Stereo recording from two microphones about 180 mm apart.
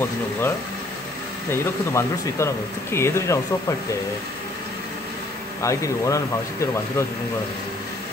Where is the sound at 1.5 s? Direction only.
15° left (ahead or behind).